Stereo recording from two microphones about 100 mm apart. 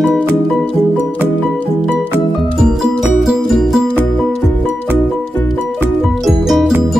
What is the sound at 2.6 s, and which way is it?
Music, 5° right (ahead or behind).